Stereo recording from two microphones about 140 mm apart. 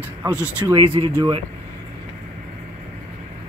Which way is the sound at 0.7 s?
35° right (ahead or behind).